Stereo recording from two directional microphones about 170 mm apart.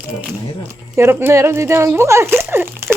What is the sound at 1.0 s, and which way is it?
Speech, 15° right (ahead or behind).